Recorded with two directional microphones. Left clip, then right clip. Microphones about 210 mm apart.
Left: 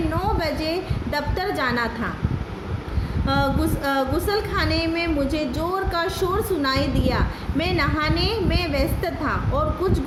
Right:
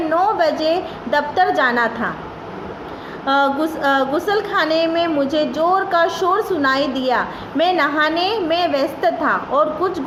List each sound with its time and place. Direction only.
0.2 s a woman's voice: 15° left (ahead or behind)
3.3 s a woman's voice: 15° left (ahead or behind)